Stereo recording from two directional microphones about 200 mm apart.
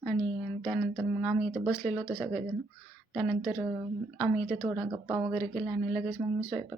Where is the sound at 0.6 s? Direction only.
Centre (ahead or behind).